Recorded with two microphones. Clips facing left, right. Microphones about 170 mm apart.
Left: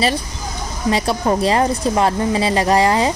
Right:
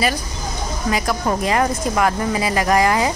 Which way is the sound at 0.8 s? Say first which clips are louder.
Left 3 dB; 30° left (ahead or behind).